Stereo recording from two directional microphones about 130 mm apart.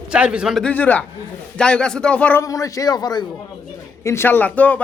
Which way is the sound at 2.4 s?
25° left (ahead or behind).